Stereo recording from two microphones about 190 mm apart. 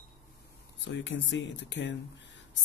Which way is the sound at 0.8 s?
75° left (ahead or behind).